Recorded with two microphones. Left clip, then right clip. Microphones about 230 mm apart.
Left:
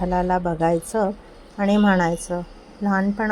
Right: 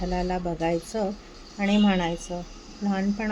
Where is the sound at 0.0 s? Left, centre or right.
Centre.